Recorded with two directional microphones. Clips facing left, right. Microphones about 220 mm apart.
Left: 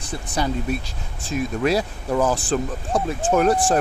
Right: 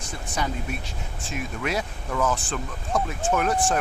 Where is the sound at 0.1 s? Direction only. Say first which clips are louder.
Left 5 dB; 35° left (ahead or behind).